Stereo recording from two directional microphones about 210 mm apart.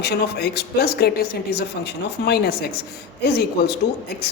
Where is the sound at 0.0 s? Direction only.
50° left (ahead or behind).